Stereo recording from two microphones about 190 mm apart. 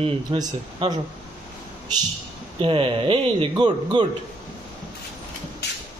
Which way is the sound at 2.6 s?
25° right (ahead or behind).